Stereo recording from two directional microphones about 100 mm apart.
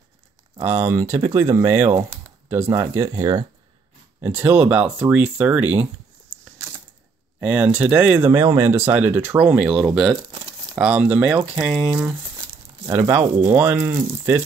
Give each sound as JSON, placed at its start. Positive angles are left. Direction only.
{"t": 0.7, "sound": "speech", "side_deg": -30}
{"t": 4.2, "sound": "speech", "side_deg": -20}
{"t": 7.3, "sound": "speech", "side_deg": -15}
{"t": 8.3, "sound": "speech", "side_deg": -35}
{"t": 10.3, "sound": "crumpling", "side_deg": -45}
{"t": 10.8, "sound": "speech", "side_deg": -10}
{"t": 12.0, "sound": "a sound", "side_deg": -20}
{"t": 13.4, "sound": "speech", "side_deg": -20}